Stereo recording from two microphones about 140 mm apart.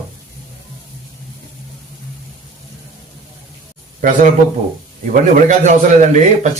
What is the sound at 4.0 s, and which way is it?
A man's voice, 70° right (ahead or behind).